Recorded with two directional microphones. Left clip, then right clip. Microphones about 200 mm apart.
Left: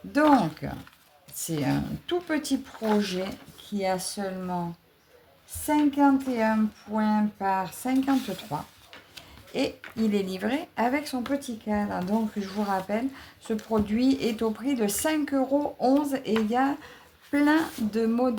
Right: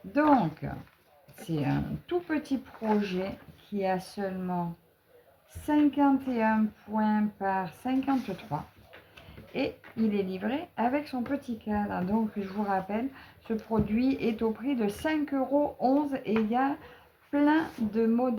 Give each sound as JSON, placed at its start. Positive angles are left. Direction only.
{"t": 0.1, "sound": "speech", "side_deg": 40}
{"t": 5.6, "sound": "speech", "side_deg": 30}